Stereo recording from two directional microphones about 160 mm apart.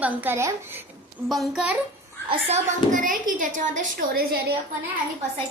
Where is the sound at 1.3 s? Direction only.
Centre (ahead or behind).